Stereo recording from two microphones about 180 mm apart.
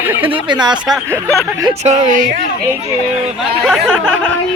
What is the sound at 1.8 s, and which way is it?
Speech, 40° right (ahead or behind).